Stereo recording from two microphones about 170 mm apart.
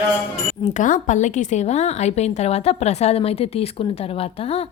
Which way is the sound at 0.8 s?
50° left (ahead or behind).